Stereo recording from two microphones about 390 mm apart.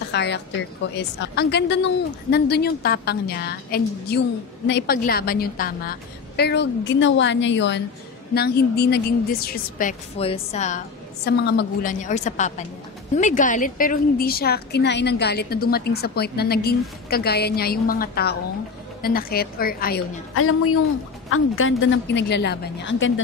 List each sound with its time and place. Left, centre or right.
0.1 s a woman's voice: left
20.3 s a woman's voice: left